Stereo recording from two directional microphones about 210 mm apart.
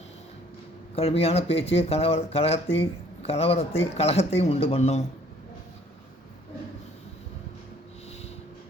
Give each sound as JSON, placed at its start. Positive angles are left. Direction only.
{"t": 0.9, "sound": "speech", "side_deg": 30}